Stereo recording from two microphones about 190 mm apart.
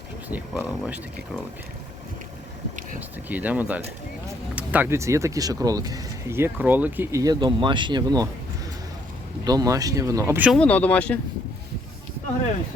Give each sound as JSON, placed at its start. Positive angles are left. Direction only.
{"t": 0.3, "sound": "speech", "side_deg": -10}
{"t": 3.2, "sound": "speech", "side_deg": -10}
{"t": 9.4, "sound": "speech", "side_deg": -20}
{"t": 10.5, "sound": "speech", "side_deg": 5}